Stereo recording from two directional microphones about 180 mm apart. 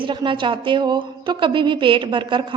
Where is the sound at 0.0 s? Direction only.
25° right (ahead or behind).